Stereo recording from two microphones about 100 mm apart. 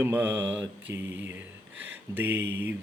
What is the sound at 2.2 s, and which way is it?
Mantra, 20° right (ahead or behind).